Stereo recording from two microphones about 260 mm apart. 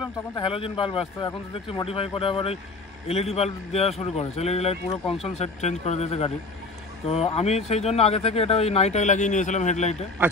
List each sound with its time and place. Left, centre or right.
0.4 s speech: left